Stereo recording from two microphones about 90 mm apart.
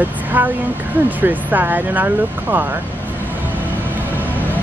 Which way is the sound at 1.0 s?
20° right (ahead or behind).